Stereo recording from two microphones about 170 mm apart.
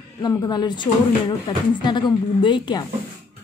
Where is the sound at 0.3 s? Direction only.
25° left (ahead or behind).